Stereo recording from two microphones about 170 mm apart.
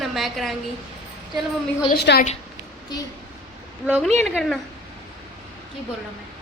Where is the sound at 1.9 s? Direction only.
65° left (ahead or behind).